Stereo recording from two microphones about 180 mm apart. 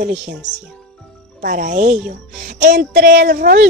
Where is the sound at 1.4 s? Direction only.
45° right (ahead or behind).